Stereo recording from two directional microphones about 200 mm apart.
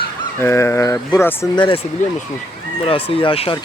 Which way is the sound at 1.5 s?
25° left (ahead or behind).